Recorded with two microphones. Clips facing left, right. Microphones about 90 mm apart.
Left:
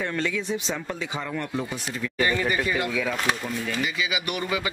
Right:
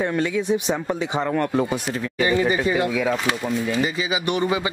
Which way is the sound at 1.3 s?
65° right (ahead or behind).